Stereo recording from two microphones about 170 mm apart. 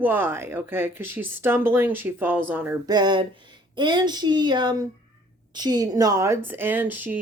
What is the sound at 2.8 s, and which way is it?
A woman's voice, 25° right (ahead or behind).